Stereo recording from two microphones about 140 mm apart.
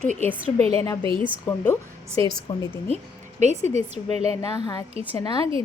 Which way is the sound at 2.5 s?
25° left (ahead or behind).